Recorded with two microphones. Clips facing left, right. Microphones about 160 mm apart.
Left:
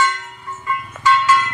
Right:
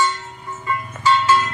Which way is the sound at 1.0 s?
30° right (ahead or behind).